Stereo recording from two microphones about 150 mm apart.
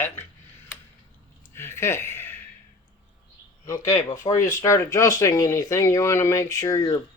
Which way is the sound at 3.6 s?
20° left (ahead or behind).